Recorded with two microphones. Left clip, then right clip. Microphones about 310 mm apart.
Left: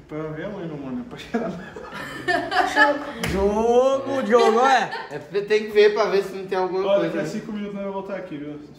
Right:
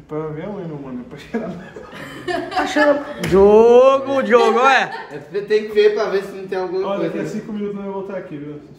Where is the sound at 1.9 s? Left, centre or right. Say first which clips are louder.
Left 1 dB; centre.